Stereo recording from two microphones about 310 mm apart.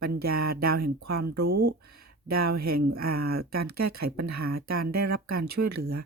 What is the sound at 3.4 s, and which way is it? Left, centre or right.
Speech, right.